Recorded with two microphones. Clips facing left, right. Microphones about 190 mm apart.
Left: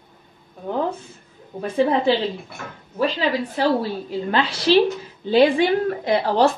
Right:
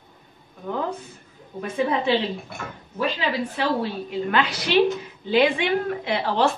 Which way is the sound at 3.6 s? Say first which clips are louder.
Left 6 dB; 35° left (ahead or behind).